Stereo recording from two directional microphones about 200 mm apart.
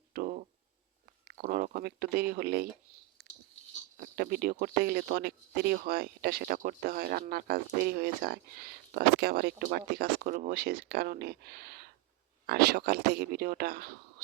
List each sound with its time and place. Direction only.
0.1 s a sound: 45° right (ahead or behind)
1.3 s speech: 50° right (ahead or behind)
3.2 s goat: 55° right (ahead or behind)
3.9 s speech: 45° right (ahead or behind)